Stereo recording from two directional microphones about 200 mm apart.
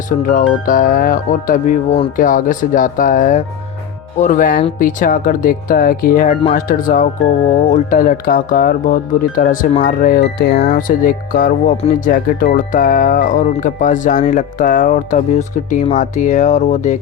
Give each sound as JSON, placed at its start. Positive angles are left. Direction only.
{"t": 0.3, "sound": "speech", "side_deg": 45}
{"t": 4.2, "sound": "music", "side_deg": 40}
{"t": 4.8, "sound": "speech", "side_deg": 40}
{"t": 11.9, "sound": "music", "side_deg": 40}